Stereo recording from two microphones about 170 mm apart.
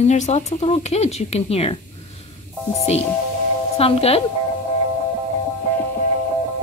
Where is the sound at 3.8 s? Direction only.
35° left (ahead or behind).